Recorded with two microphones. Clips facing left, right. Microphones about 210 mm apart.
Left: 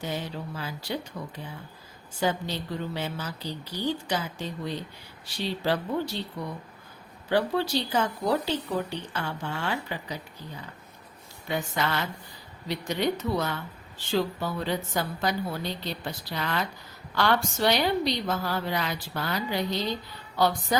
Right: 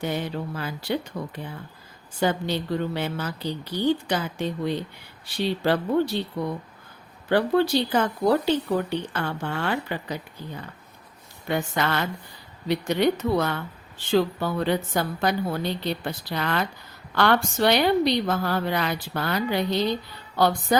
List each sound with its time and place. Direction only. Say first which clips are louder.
0.0 s a woman's voice: right 5 dB; 60° right (ahead or behind)
1.1 s speech: right 5 dB; 50° right (ahead or behind)
2.2 s a woman's voice: right 4 dB; 60° right (ahead or behind)
7.3 s a woman's voice: right 5 dB; 55° right (ahead or behind)
11.4 s a woman's voice: right 4 dB; 60° right (ahead or behind)